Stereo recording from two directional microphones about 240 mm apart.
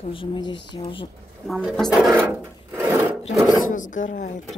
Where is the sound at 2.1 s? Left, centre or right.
Centre.